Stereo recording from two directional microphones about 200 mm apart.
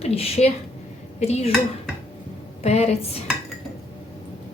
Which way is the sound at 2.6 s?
30° left (ahead or behind).